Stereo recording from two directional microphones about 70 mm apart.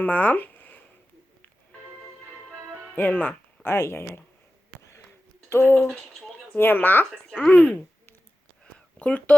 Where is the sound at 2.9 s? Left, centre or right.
Left.